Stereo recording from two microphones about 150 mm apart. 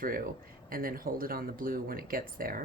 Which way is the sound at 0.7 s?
70° right (ahead or behind).